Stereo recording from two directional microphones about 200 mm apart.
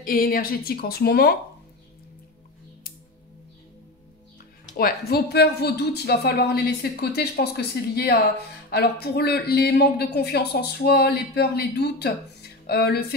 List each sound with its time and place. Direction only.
0.0 s speech: 45° left (ahead or behind)
4.7 s speech: 50° left (ahead or behind)